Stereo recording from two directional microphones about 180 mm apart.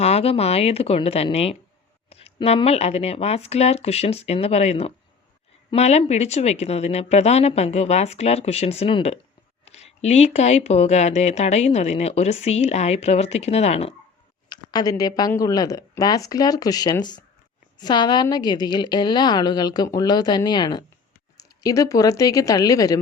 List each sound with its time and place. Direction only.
0.0 s speech: 35° left (ahead or behind)
14.5 s a woman's voice: 20° left (ahead or behind)